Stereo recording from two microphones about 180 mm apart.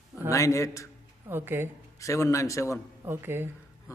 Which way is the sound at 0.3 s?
15° left (ahead or behind).